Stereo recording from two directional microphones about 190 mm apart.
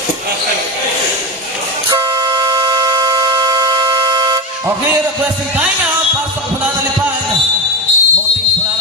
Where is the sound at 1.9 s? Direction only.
20° right (ahead or behind).